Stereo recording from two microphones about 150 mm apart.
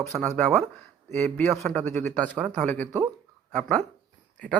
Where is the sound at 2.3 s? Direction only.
5° right (ahead or behind).